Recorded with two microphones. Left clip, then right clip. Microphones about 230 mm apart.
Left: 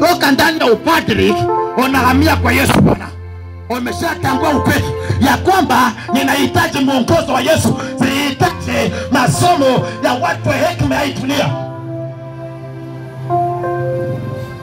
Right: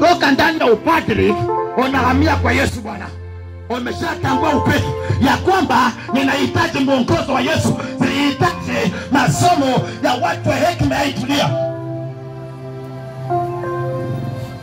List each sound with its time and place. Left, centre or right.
0.0 s speech: centre
3.6 s music: left